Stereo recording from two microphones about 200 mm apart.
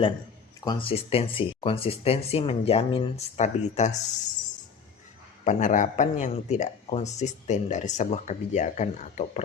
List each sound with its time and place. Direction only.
0.6 s speech: 25° left (ahead or behind)
5.5 s speech: 40° left (ahead or behind)